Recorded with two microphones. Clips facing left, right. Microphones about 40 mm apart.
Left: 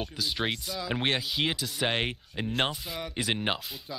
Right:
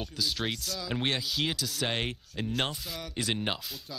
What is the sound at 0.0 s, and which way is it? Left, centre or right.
Speech, centre.